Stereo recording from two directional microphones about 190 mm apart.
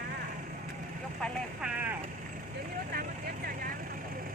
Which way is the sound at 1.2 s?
5° right (ahead or behind).